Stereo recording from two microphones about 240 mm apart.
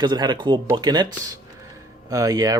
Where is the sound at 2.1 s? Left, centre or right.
Centre.